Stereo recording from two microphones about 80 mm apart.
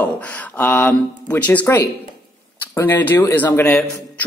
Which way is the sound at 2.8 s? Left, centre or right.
Left.